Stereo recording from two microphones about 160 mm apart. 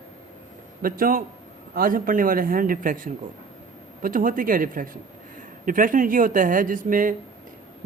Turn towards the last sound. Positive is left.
turn(degrees=-60)  # may be behind; listen again after turning